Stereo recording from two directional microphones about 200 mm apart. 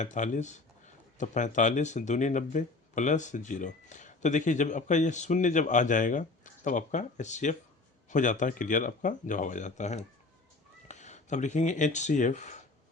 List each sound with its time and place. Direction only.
0.0 s speech: 40° left (ahead or behind)